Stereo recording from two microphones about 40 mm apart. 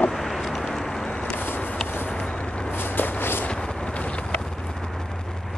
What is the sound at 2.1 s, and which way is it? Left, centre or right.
Vehicle, left.